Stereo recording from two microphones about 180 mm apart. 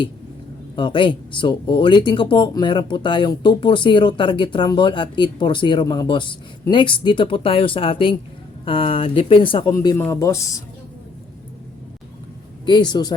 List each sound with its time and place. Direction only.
0.8 s speech: 25° left (ahead or behind)
12.6 s speech: 25° left (ahead or behind)